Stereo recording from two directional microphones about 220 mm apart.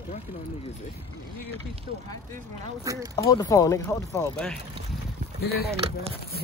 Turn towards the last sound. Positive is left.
turn(degrees=45)  # may be behind; listen again after turning